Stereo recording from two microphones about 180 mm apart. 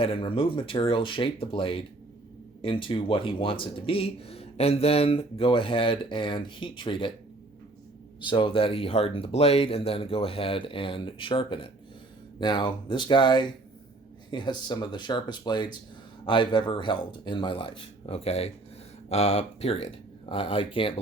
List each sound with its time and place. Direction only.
0.0 s speech: 30° left (ahead or behind)
8.3 s speech: 30° left (ahead or behind)